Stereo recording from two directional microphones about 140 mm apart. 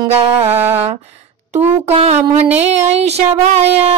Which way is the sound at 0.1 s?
45° right (ahead or behind).